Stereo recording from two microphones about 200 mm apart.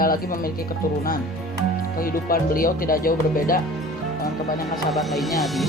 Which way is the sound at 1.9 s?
45° left (ahead or behind).